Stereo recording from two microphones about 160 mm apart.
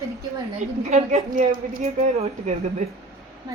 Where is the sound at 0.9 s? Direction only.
50° right (ahead or behind).